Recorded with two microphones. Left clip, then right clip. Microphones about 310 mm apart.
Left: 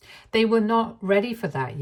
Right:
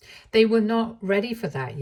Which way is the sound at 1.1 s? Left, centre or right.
Left.